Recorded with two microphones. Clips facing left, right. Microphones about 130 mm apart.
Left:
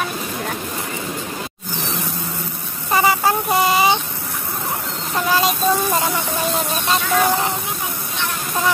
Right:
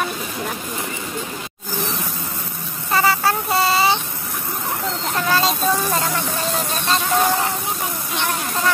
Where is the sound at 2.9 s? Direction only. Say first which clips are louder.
Left 2 dB; 15° left (ahead or behind).